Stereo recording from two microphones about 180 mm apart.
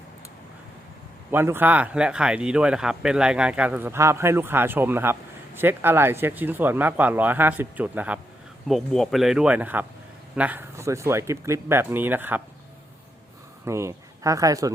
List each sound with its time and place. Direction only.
1.3 s speech: 10° right (ahead or behind)
13.7 s speech: 15° right (ahead or behind)